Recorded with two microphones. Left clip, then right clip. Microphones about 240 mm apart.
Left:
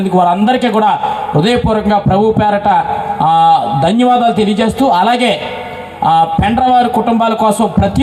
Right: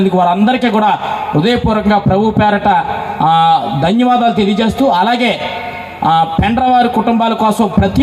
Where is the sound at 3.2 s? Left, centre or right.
Left.